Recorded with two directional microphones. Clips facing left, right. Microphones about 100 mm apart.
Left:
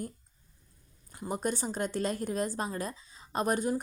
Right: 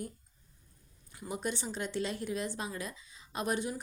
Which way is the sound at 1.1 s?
40° left (ahead or behind).